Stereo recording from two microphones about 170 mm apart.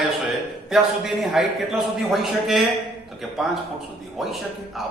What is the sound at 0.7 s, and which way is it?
A man's voice, centre (ahead or behind).